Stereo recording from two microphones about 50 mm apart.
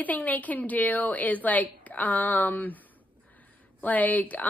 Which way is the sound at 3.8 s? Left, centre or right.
Left.